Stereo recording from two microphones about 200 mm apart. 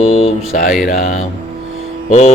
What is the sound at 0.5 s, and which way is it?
Mantra, 40° left (ahead or behind).